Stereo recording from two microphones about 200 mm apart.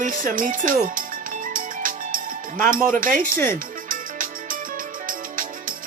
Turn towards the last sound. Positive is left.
turn(degrees=-40)  # may be behind; listen again after turning